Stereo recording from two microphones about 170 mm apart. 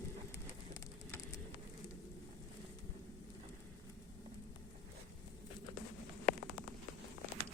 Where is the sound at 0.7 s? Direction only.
20° left (ahead or behind).